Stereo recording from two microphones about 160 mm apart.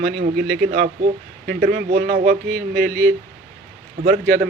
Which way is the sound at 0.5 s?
90° right.